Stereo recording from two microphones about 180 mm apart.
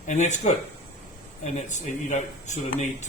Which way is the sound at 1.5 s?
40° left (ahead or behind).